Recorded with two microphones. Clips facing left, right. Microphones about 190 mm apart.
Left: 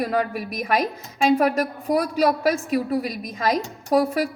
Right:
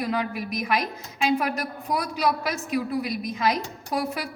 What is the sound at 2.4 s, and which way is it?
A woman's voice, 40° left (ahead or behind).